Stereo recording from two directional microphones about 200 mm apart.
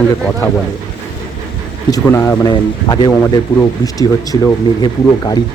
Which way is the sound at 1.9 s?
15° left (ahead or behind).